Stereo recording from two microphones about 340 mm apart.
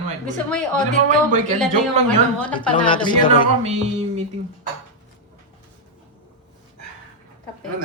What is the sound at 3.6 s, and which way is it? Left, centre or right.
Music, centre.